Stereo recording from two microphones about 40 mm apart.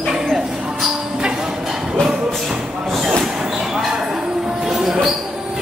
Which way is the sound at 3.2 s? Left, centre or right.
Centre.